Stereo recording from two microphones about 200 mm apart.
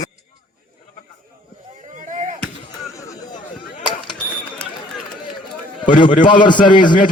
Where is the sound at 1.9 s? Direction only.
40° right (ahead or behind).